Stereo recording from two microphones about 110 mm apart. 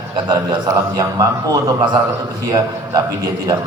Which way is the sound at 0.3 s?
35° right (ahead or behind).